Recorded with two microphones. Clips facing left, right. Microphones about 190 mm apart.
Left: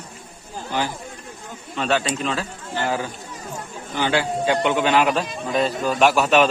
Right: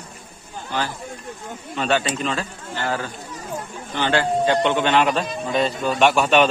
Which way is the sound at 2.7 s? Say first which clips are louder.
Left 2 dB; 15° left (ahead or behind).